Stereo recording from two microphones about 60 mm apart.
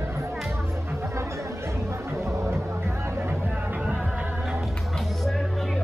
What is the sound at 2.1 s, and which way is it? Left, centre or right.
Music, right.